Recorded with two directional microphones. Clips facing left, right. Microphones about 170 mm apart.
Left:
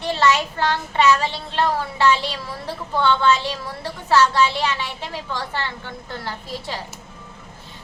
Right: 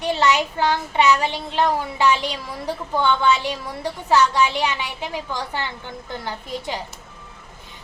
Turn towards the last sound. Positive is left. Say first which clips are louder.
# right 2 dB
turn(degrees=-15)  # may be behind; listen again after turning